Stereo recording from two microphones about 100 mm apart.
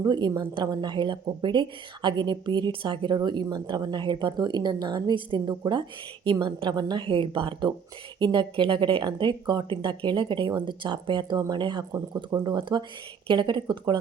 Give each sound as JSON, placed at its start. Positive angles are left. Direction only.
{"t": 0.0, "sound": "a woman's voice", "side_deg": -45}